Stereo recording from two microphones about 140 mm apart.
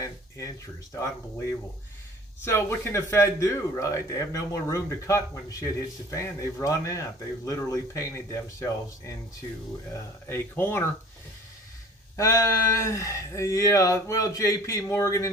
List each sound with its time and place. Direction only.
0.0 s a sound: 25° left (ahead or behind)
2.4 s a man's voice: 20° left (ahead or behind)
10.2 s speech: 15° left (ahead or behind)
12.1 s a man's voice: 25° left (ahead or behind)